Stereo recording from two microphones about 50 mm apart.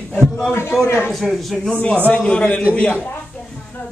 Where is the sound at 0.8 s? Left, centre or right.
Left.